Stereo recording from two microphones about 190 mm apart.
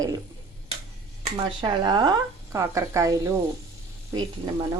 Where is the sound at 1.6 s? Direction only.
25° right (ahead or behind).